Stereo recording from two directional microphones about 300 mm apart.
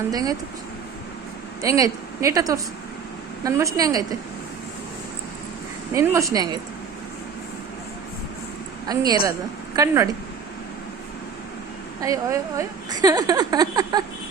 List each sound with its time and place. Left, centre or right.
0.1 s a woman's voice: centre
1.6 s a woman's voice: centre
5.9 s a woman's voice: centre
8.9 s a woman's voice: centre
11.9 s a woman's voice: centre